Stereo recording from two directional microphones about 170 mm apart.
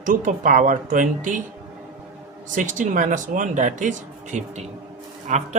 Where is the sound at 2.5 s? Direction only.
50° right (ahead or behind).